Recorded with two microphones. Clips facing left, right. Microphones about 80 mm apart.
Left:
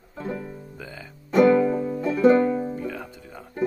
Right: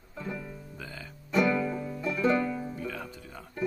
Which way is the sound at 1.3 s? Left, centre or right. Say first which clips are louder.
Left 9 dB; left.